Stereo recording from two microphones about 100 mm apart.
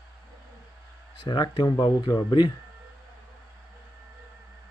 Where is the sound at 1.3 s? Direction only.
45° left (ahead or behind).